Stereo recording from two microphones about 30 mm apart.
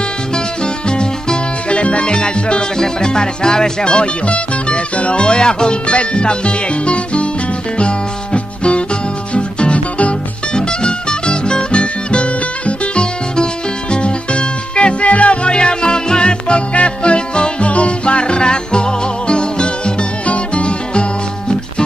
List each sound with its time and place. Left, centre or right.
0.8 s music: left
4.6 s music: left
5.2 s music: left
10.5 s music: left
15.5 s music: left
20.2 s music: left